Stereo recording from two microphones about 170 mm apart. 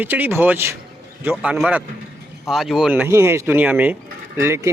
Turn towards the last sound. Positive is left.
turn(degrees=-15)  # may be behind; listen again after turning